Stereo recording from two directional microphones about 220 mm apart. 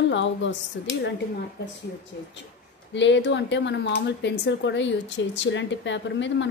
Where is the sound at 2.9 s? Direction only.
55° left (ahead or behind).